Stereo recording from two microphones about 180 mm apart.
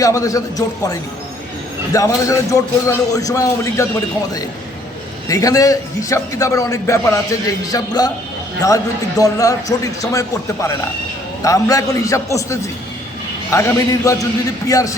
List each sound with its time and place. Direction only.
0.0 s a man's voice: 20° left (ahead or behind)
5.3 s a man's voice: 20° left (ahead or behind)